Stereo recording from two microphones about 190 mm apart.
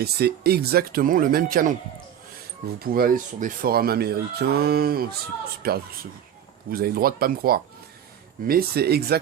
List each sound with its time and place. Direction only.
0.0 s speech: 55° right (ahead or behind)
2.7 s speech: 50° right (ahead or behind)